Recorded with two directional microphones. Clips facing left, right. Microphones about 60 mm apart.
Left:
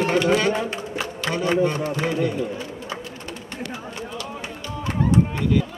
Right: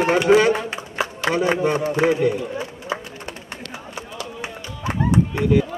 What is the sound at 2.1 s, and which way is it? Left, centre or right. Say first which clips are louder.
Run: right 3 dB; centre.